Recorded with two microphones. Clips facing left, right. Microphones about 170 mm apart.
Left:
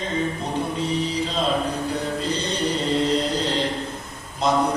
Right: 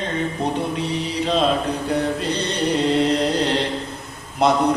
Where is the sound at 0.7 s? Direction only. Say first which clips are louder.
Even; 65° right (ahead or behind).